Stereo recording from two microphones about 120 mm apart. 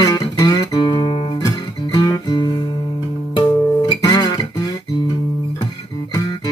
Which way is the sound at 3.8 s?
35° left (ahead or behind).